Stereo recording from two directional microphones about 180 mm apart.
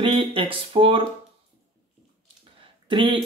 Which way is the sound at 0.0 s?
25° right (ahead or behind).